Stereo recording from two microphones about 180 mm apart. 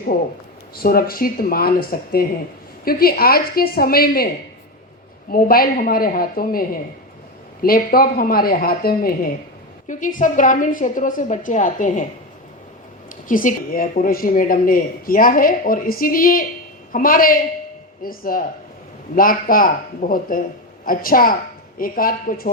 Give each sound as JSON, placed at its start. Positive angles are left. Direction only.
{"t": 0.8, "sound": "a woman's voice", "side_deg": 55}
{"t": 5.3, "sound": "a woman's voice", "side_deg": 55}
{"t": 13.2, "sound": "a woman's voice", "side_deg": 50}